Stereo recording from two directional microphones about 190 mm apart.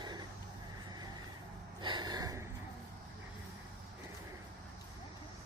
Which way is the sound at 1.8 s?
25° right (ahead or behind).